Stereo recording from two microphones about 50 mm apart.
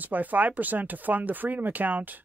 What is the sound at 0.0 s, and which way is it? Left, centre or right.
Speech, right.